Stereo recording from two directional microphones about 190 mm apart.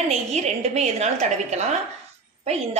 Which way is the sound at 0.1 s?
35° right (ahead or behind).